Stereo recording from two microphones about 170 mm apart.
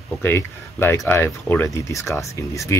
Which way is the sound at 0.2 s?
15° left (ahead or behind).